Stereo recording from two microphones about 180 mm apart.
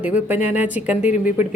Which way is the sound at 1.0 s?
40° left (ahead or behind).